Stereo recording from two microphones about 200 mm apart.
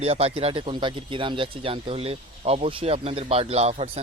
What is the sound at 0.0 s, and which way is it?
Speech, 30° right (ahead or behind).